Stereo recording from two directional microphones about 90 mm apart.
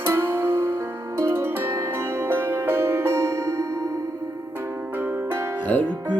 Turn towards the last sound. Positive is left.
turn(degrees=15)  # may be behind; listen again after turning